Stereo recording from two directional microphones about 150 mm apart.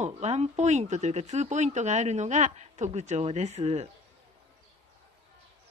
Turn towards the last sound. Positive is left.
turn(degrees=-45)  # may be behind; listen again after turning